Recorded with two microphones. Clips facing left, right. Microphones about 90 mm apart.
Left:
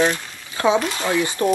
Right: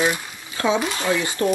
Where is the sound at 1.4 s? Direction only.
30° left (ahead or behind).